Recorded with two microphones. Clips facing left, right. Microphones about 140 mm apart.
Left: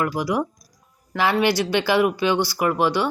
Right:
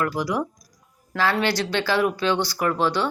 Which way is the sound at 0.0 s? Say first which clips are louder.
Left 2 dB; 10° left (ahead or behind).